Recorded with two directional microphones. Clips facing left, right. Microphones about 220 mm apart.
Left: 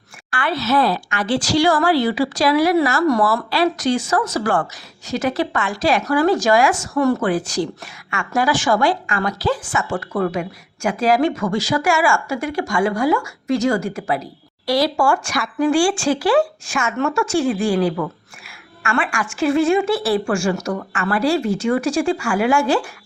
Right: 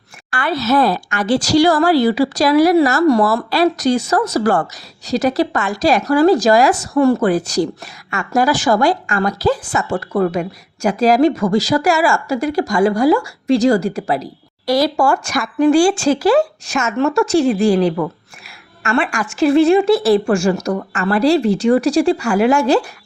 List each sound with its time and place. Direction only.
0.3 s a woman's voice: 40° right (ahead or behind)